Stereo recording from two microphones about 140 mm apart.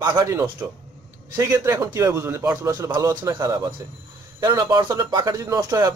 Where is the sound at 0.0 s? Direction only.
30° right (ahead or behind).